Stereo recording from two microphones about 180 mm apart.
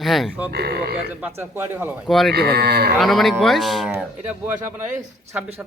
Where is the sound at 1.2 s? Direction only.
15° right (ahead or behind).